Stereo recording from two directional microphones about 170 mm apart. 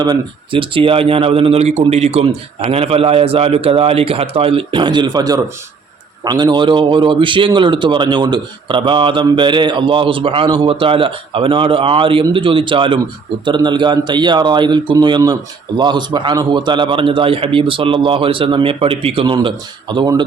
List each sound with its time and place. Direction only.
0.0 s speech: 25° right (ahead or behind)